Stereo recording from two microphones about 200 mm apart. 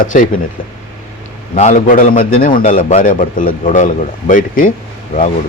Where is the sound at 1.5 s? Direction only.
35° left (ahead or behind).